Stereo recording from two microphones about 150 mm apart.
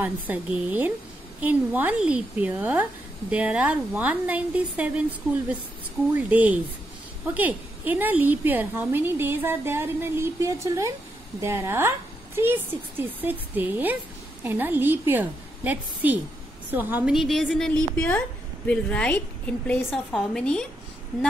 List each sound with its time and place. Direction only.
0.0 s a woman's voice: 10° right (ahead or behind); by 20.6 s 5° left (ahead or behind)